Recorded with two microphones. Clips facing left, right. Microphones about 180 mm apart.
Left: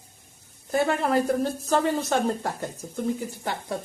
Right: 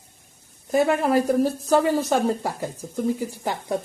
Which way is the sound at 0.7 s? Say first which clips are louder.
Right 3 dB; 10° right (ahead or behind).